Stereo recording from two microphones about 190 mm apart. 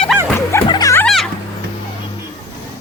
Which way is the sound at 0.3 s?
15° left (ahead or behind).